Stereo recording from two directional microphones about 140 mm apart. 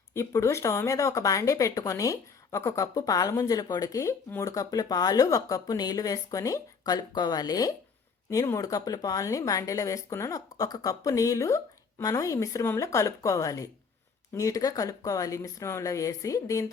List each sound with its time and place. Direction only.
0.1 s speech: 20° left (ahead or behind)